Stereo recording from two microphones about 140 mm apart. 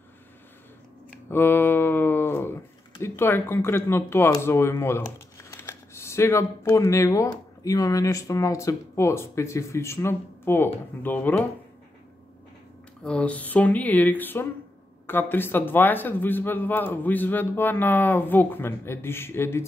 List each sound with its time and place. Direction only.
1.3 s a sound: 15° left (ahead or behind)
3.0 s speech: 15° left (ahead or behind)
13.0 s a man's voice: 5° left (ahead or behind)